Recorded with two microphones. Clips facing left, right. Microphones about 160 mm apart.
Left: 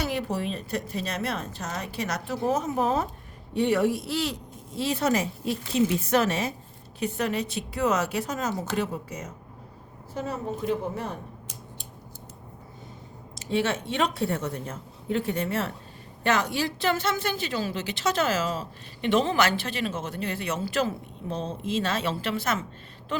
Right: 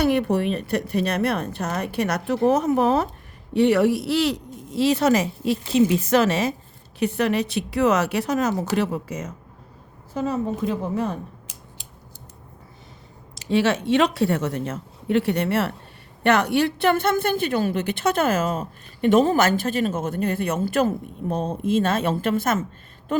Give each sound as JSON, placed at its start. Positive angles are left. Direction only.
{"t": 0.0, "sound": "a woman's voice", "side_deg": -60}
{"t": 7.0, "sound": "a woman's voice", "side_deg": -75}
{"t": 13.3, "sound": "a woman's voice", "side_deg": -90}